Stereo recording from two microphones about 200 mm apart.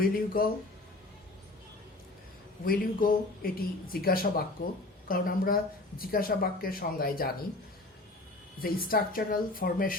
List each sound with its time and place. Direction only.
0.0 s speech: 45° left (ahead or behind)
2.6 s speech: 45° left (ahead or behind)
8.6 s speech: 45° left (ahead or behind)